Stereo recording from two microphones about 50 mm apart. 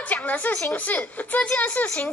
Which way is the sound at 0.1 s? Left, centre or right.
Left.